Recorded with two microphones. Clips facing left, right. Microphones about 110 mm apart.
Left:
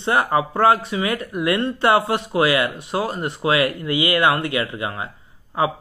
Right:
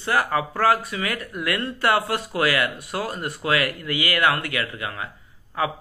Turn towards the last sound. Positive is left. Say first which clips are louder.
# left 4 dB
turn(degrees=25)  # may be behind; listen again after turning